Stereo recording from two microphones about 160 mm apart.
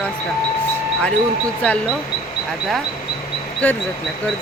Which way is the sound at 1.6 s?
5° left (ahead or behind).